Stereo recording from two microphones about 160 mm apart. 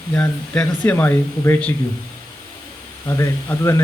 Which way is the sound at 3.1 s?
15° left (ahead or behind).